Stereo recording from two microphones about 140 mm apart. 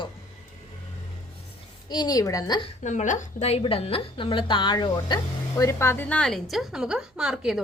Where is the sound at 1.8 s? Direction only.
30° left (ahead or behind).